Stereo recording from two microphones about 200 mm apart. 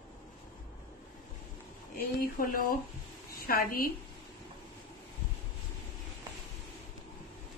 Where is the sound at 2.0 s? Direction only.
45° left (ahead or behind).